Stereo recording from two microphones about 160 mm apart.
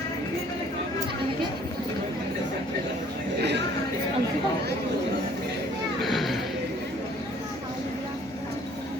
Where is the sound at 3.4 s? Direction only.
90° right.